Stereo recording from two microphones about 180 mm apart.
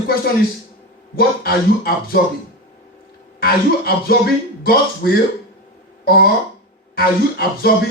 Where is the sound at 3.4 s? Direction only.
55° left (ahead or behind).